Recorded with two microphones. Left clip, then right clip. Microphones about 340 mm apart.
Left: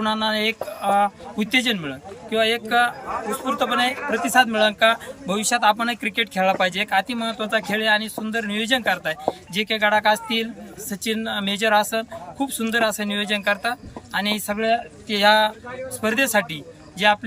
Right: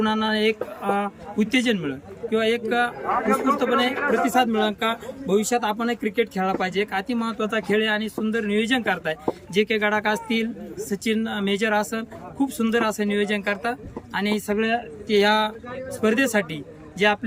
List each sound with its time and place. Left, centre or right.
0.0 s speech: centre
3.1 s speech: right
4.3 s speech: centre